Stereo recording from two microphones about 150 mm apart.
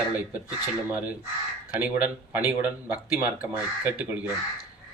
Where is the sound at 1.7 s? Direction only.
10° right (ahead or behind).